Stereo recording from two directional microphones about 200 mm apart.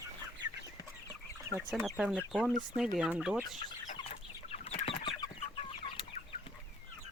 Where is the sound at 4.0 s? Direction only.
30° left (ahead or behind).